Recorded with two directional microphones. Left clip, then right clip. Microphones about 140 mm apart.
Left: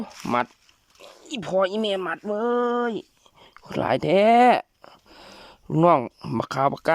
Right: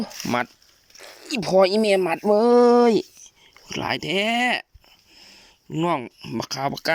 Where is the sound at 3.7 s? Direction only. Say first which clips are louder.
Left 4 dB; 25° left (ahead or behind).